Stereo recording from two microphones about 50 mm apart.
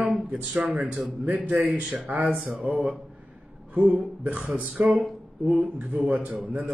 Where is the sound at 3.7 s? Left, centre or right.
Right.